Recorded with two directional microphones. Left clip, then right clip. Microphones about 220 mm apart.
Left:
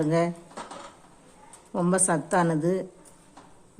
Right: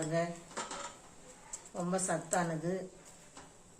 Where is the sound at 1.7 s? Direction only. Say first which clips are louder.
Left 10 dB; 50° left (ahead or behind).